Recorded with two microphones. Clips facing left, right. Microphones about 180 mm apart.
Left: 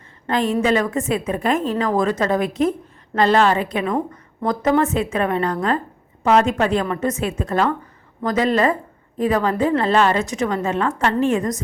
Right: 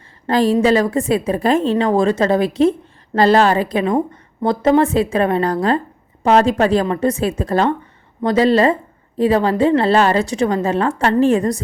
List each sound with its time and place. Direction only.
0.3 s a woman's voice: 35° right (ahead or behind)